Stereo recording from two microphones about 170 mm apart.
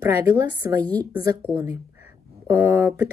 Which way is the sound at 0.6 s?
20° right (ahead or behind).